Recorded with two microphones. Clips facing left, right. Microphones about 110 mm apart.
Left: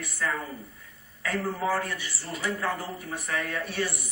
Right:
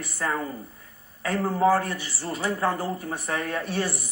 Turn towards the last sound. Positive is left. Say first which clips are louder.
# right 3 dB
turn(degrees=-35)  # may be behind; listen again after turning